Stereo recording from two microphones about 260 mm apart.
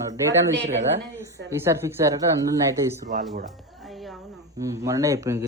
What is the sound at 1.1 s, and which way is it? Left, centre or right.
A woman's voice, centre.